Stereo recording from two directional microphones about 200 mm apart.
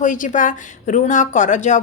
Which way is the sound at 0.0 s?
40° left (ahead or behind).